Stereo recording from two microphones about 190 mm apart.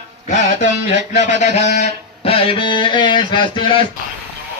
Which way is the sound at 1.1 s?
35° left (ahead or behind).